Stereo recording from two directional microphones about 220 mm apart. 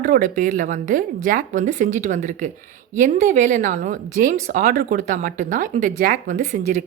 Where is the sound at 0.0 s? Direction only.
40° right (ahead or behind).